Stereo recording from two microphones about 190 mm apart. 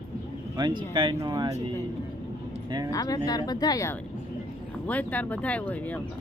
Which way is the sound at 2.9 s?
20° left (ahead or behind).